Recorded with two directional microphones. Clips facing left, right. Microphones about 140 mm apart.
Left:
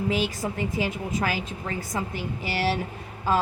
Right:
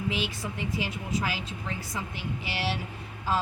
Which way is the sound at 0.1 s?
45° left (ahead or behind).